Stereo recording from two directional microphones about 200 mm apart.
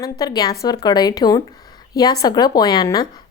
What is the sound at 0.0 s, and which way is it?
A woman's voice, 20° left (ahead or behind).